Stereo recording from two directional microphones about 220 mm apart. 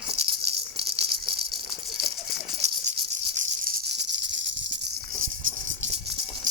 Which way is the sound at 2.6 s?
30° right (ahead or behind).